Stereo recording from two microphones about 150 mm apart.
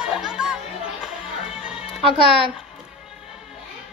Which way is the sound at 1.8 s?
40° left (ahead or behind).